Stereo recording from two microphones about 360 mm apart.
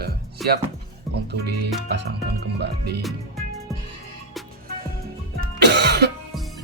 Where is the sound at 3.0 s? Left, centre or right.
Centre.